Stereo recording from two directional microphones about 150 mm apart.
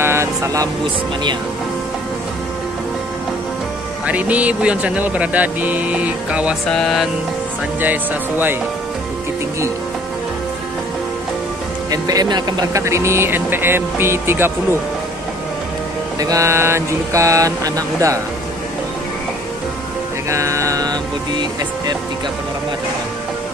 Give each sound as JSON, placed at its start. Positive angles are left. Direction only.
{"t": 0.0, "sound": "music", "side_deg": -20}
{"t": 4.0, "sound": "speech", "side_deg": -10}
{"t": 6.7, "sound": "music", "side_deg": 0}
{"t": 7.8, "sound": "speech", "side_deg": -10}
{"t": 11.9, "sound": "speech", "side_deg": -25}
{"t": 16.2, "sound": "speech", "side_deg": -20}
{"t": 20.2, "sound": "music", "side_deg": -20}